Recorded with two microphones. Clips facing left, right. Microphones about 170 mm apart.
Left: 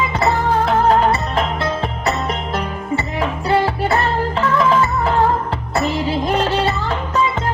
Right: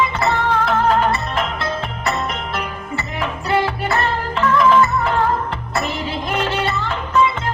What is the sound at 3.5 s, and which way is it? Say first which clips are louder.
Music: left 2 dB; 35° left (ahead or behind).